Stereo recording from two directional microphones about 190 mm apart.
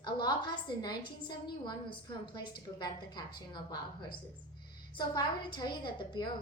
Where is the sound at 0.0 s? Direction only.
25° left (ahead or behind).